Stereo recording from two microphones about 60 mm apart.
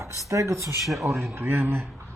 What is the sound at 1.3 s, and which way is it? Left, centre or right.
Speech, right.